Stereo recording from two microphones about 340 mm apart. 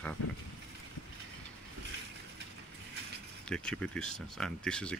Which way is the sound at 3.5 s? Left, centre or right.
Centre.